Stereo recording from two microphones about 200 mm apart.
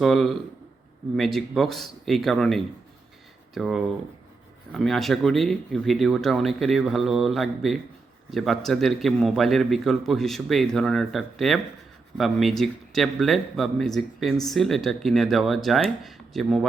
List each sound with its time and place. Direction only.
0.0 s a man's voice: centre (ahead or behind)